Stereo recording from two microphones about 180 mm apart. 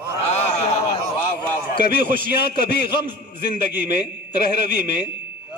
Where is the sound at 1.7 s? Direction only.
60° left (ahead or behind).